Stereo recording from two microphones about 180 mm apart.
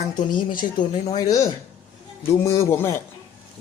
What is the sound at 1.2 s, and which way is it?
A man's voice, 20° left (ahead or behind).